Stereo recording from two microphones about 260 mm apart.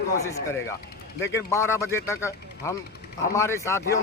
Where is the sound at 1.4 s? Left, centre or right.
Centre.